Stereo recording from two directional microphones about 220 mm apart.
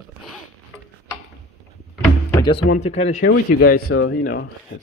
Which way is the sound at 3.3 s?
45° left (ahead or behind).